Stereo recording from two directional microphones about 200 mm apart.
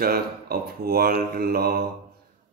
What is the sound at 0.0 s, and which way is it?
Speech, 50° right (ahead or behind).